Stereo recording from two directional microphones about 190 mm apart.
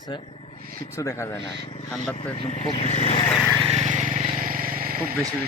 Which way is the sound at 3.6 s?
35° right (ahead or behind).